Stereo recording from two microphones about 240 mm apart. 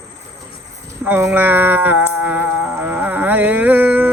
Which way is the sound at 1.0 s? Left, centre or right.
Centre.